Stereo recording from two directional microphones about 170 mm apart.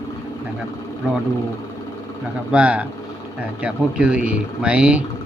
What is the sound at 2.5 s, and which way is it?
Speech, 5° right (ahead or behind).